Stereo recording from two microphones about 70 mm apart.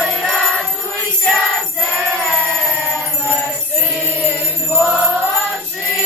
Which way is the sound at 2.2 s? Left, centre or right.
Centre.